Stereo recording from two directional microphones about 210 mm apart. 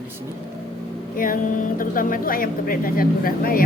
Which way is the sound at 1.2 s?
40° left (ahead or behind).